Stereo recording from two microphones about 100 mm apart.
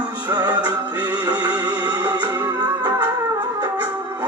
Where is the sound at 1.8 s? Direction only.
45° right (ahead or behind).